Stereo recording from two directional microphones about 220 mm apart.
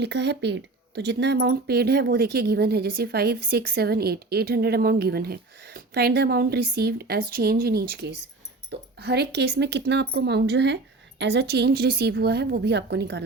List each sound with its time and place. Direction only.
0.0 s speech: 50° right (ahead or behind)